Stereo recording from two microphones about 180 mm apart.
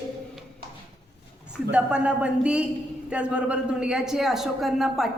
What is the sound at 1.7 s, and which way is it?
Speech, 5° right (ahead or behind).